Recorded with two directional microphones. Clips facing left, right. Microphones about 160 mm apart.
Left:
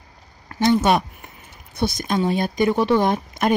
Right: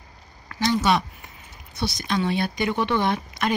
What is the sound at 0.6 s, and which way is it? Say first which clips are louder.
Speech: left 4 dB; 50° left (ahead or behind).